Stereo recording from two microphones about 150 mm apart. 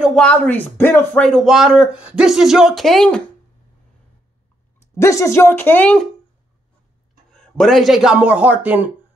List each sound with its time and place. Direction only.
0.0 s speech: 5° left (ahead or behind)
1.2 s speech: centre (ahead or behind)
4.7 s speech: 20° left (ahead or behind)
7.3 s speech: 5° left (ahead or behind)